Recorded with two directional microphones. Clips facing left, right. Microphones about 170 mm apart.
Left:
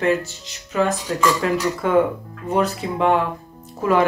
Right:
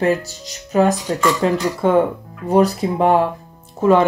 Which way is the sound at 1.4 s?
30° right (ahead or behind).